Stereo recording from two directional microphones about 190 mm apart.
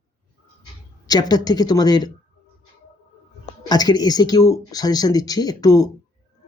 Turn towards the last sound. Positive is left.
turn(degrees=20)  # may be behind; listen again after turning